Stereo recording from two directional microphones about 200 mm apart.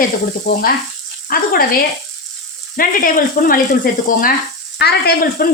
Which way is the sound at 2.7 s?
45° left (ahead or behind).